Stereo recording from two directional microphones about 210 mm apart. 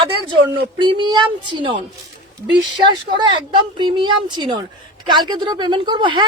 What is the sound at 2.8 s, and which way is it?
Speech, 20° right (ahead or behind).